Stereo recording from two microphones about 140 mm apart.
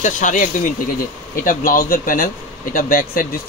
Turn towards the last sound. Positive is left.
turn(degrees=80)